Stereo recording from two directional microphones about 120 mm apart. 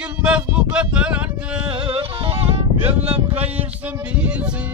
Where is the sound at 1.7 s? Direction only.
50° right (ahead or behind).